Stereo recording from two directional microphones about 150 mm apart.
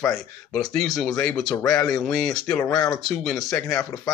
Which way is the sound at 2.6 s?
25° left (ahead or behind).